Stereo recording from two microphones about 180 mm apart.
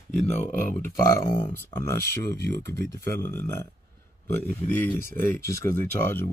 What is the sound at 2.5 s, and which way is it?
Speech, 70° right (ahead or behind).